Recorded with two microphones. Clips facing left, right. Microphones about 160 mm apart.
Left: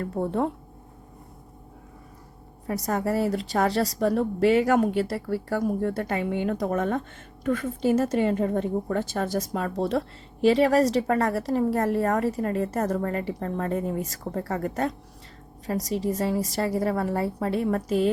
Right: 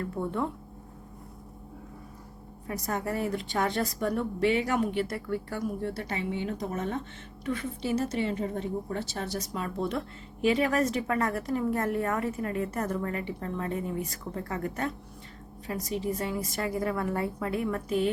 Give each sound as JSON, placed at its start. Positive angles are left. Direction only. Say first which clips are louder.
{"t": 0.0, "sound": "a woman's voice", "louder": "left 5 dB", "side_deg": 35}
{"t": 2.6, "sound": "a woman's voice", "louder": "left 6 dB", "side_deg": 40}